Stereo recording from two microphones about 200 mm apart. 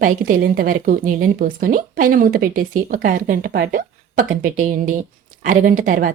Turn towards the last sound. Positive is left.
turn(degrees=-40)  # may be behind; listen again after turning